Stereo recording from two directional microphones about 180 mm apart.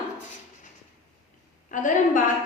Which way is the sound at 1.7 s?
45° left (ahead or behind).